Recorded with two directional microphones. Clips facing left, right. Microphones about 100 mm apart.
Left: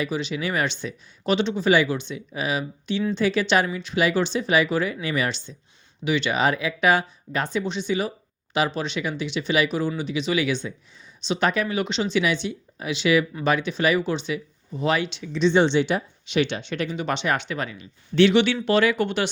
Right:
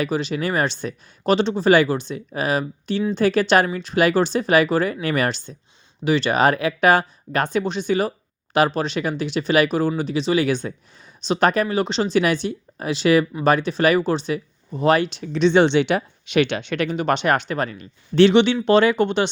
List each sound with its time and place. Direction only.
0.0 s speech: 45° right (ahead or behind)
6.1 s speech: 40° right (ahead or behind)